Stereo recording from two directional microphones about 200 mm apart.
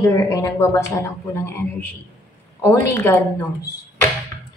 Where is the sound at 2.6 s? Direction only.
10° left (ahead or behind).